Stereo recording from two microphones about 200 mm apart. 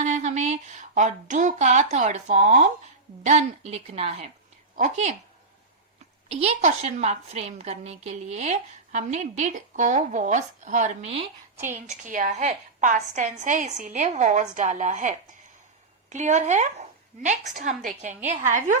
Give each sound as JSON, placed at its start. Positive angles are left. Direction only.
{"t": 0.0, "sound": "a woman's voice", "side_deg": -35}
{"t": 6.2, "sound": "a woman's voice", "side_deg": -30}